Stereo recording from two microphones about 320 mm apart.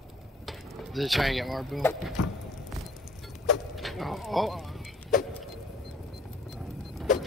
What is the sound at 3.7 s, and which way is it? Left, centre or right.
Vehicle, centre.